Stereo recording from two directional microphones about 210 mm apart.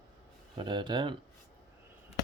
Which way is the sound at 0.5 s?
25° right (ahead or behind).